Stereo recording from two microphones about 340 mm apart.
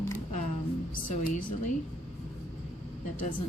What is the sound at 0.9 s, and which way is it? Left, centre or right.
Speech, left.